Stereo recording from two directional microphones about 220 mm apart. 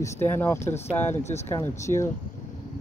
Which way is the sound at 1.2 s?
30° left (ahead or behind).